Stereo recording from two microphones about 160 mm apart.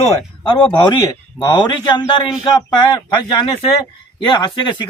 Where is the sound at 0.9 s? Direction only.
20° left (ahead or behind).